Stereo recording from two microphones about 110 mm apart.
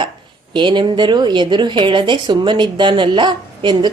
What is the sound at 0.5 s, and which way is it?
Speech, 45° right (ahead or behind).